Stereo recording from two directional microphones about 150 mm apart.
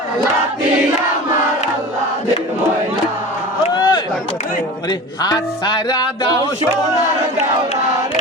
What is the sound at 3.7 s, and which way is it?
Chop, 30° left (ahead or behind).